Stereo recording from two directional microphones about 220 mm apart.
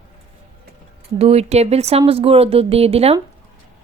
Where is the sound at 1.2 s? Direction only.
30° right (ahead or behind).